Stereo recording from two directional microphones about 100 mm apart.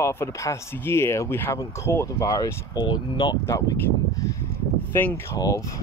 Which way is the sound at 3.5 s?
35° left (ahead or behind).